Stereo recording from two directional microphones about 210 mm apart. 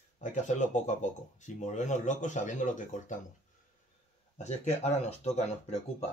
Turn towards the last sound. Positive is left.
turn(degrees=30)  # may be behind; listen again after turning